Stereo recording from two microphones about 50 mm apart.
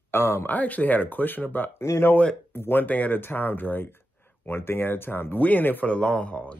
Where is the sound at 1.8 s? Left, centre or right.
Left.